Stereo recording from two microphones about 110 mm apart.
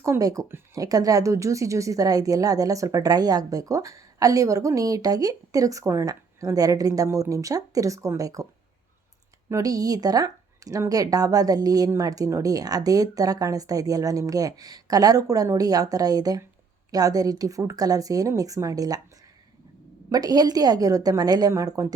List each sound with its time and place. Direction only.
0.0 s a woman's voice: 30° right (ahead or behind)
0.4 s speech: 20° right (ahead or behind)
0.8 s a woman's voice: 35° right (ahead or behind)
9.5 s a woman's voice: 30° right (ahead or behind)
20.1 s a woman's voice: 35° right (ahead or behind)